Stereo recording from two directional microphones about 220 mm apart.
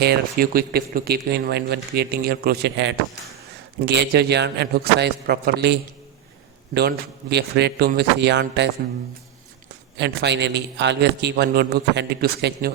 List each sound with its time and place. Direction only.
0.0 s speech: 45° right (ahead or behind)
10.0 s speech: 50° right (ahead or behind)